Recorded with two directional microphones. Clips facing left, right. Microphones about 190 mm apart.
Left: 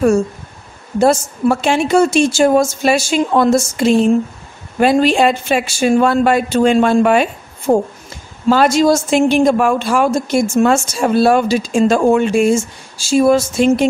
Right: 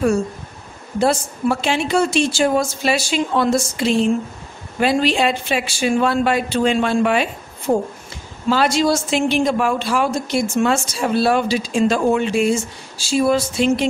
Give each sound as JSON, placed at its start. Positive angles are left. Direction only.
{"t": 0.9, "sound": "a woman's voice", "side_deg": 45}